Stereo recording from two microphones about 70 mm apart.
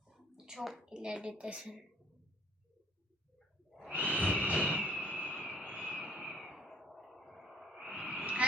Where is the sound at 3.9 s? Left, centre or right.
Right; by 8.0 s centre.